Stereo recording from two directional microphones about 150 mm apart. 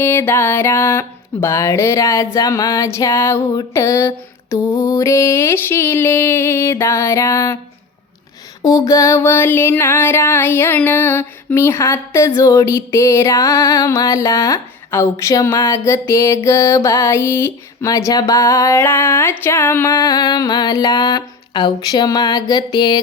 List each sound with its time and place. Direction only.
0.0 s music: 15° left (ahead or behind)
8.6 s music: 25° left (ahead or behind)